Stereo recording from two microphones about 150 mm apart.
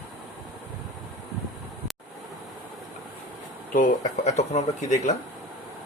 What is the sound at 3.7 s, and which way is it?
Speech, 55° left (ahead or behind).